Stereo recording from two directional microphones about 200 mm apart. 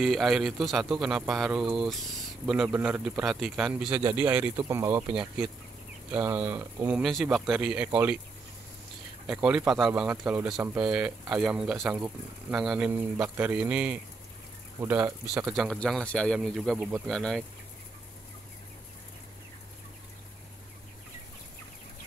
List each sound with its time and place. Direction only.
0.0 s a man's voice: centre (ahead or behind)
9.3 s a man's voice: 5° right (ahead or behind)